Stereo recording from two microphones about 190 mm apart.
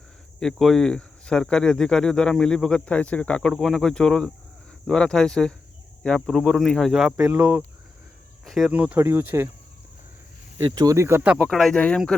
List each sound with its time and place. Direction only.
0.3 s speech: centre (ahead or behind)
7.2 s speech: 15° right (ahead or behind)
8.4 s speech: centre (ahead or behind)
10.7 s speech: 20° right (ahead or behind); by 12.1 s 5° left (ahead or behind)